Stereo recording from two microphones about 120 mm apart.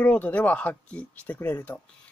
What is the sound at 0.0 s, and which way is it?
Speech, 10° left (ahead or behind).